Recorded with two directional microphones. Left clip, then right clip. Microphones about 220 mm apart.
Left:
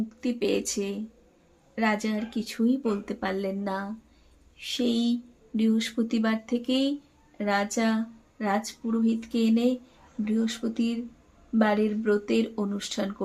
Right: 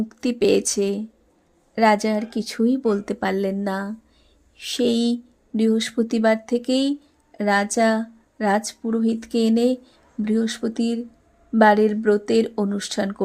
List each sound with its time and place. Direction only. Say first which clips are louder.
0.1 s a woman's voice: right 9 dB; 35° right (ahead or behind)